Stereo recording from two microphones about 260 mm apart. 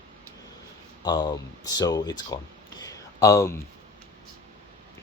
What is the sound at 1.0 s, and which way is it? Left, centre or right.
Speech, centre.